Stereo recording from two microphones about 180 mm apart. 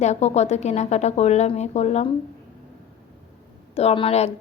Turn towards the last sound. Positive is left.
turn(degrees=35)  # may be behind; listen again after turning